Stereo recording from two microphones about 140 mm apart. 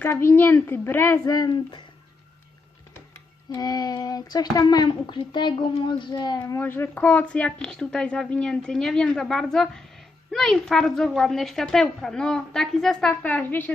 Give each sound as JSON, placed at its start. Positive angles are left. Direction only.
{"t": 0.0, "sound": "a child's voice", "side_deg": 15}
{"t": 3.5, "sound": "a child's voice", "side_deg": 30}